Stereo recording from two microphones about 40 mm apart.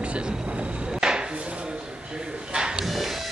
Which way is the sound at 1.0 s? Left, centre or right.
Centre.